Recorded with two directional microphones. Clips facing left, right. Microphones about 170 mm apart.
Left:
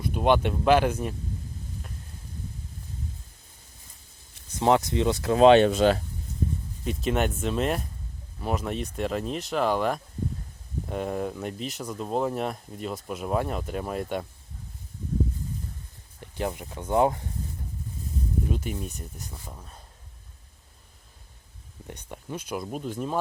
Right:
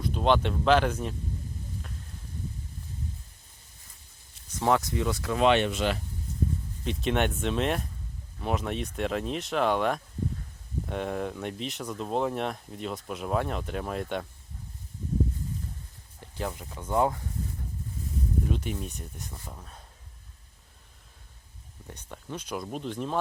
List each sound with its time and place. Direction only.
0.0 s speech: 10° left (ahead or behind)
4.6 s speech: 20° left (ahead or behind); by 6.0 s 35° left (ahead or behind)
6.8 s speech: centre (ahead or behind)
16.2 s speech: 20° left (ahead or behind)
18.5 s speech: 5° left (ahead or behind)
21.8 s speech: 15° left (ahead or behind)